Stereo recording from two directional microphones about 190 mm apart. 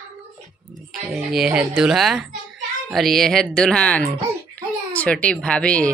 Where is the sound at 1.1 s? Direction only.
5° right (ahead or behind).